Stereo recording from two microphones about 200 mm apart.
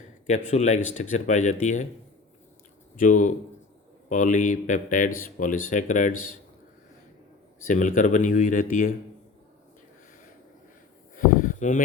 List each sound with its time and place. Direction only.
0.3 s mantra: 35° left (ahead or behind)
3.0 s mantra: 40° left (ahead or behind)
7.6 s mantra: 40° left (ahead or behind)
11.1 s a sound: 40° left (ahead or behind)